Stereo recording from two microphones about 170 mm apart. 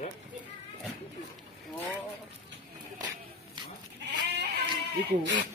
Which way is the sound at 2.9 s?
25° right (ahead or behind).